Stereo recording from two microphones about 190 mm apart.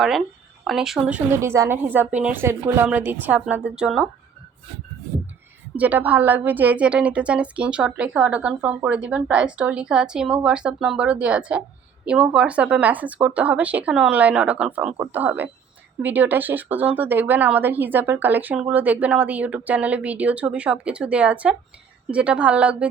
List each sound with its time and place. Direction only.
0.7 s a woman's voice: centre (ahead or behind)
5.7 s a woman's voice: 10° right (ahead or behind)